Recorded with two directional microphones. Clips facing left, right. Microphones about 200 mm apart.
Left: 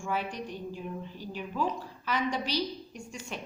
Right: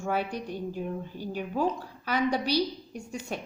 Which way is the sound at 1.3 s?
50° right (ahead or behind).